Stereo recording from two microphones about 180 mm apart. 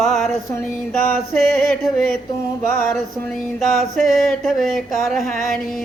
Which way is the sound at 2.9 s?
Centre (ahead or behind).